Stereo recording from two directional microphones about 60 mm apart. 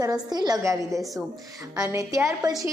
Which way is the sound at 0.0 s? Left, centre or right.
Right.